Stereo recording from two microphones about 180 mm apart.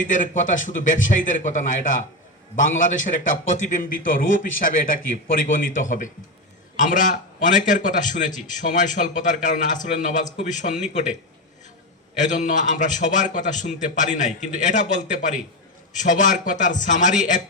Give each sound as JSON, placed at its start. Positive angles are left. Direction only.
{"t": 0.1, "sound": "a man's voice", "side_deg": 45}
{"t": 5.7, "sound": "a man's voice", "side_deg": 45}